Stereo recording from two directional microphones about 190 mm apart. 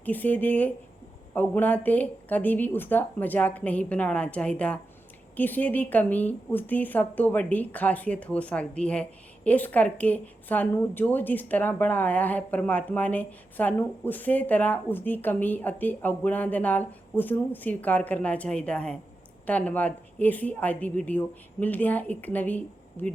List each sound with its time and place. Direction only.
0.0 s a woman's voice: 10° left (ahead or behind)